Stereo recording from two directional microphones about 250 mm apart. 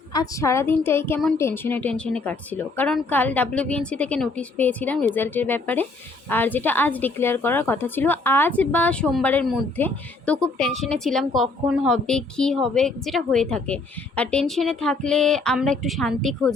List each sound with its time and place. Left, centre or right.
0.1 s a woman's voice: centre